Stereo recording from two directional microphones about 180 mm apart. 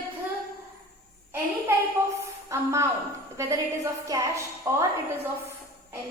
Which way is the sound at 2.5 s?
15° right (ahead or behind).